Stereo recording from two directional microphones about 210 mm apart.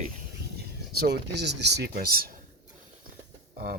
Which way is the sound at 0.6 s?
50° right (ahead or behind).